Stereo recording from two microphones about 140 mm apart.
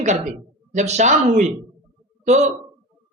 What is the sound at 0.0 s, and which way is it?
A man's voice, 60° right (ahead or behind).